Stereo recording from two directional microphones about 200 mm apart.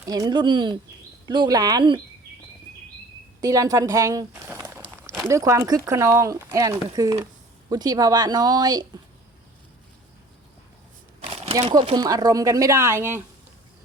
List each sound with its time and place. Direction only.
0.0 s a woman's voice: 20° right (ahead or behind)
3.4 s a sound: 15° right (ahead or behind)
5.3 s a woman's voice: 15° right (ahead or behind)
11.7 s speech: 25° right (ahead or behind)